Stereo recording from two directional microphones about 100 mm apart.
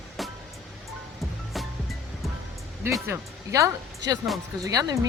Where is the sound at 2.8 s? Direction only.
25° right (ahead or behind).